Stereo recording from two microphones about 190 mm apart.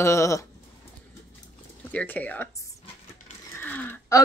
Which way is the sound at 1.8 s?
10° left (ahead or behind).